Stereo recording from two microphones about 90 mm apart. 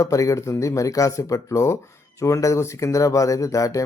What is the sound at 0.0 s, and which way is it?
Speech, 40° left (ahead or behind).